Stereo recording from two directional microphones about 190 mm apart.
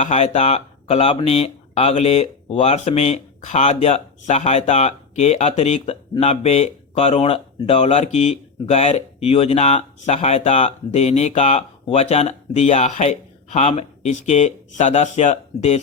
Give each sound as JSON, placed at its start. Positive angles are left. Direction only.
{"t": 0.0, "sound": "speech", "side_deg": 40}